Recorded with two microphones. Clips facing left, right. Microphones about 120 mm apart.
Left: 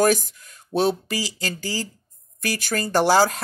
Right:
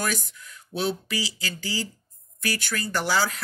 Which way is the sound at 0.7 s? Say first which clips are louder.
Left 7 dB; 75° left (ahead or behind).